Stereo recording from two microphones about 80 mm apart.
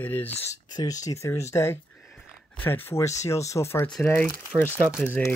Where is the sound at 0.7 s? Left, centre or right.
Left; by 5.4 s centre.